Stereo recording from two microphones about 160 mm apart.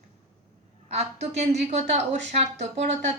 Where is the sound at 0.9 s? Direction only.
40° right (ahead or behind).